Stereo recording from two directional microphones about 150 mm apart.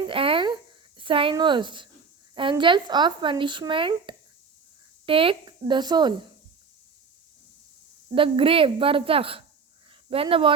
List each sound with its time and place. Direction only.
0.1 s a sound: 35° right (ahead or behind)
2.3 s speech: 35° right (ahead or behind)
8.1 s speech: 35° right (ahead or behind)